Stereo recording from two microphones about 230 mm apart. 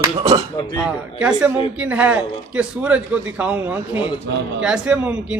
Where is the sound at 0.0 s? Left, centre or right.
Centre.